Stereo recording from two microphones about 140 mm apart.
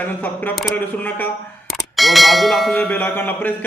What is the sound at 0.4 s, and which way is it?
Bell, 15° left (ahead or behind).